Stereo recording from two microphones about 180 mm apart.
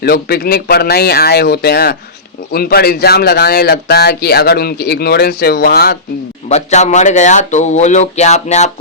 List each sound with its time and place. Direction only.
0.0 s speech: 60° left (ahead or behind)
6.5 s speech: 40° left (ahead or behind)